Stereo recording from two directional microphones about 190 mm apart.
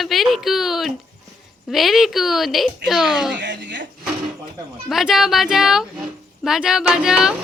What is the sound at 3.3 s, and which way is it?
Speech, 70° right (ahead or behind).